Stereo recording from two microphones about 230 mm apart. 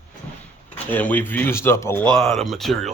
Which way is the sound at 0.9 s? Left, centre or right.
Centre.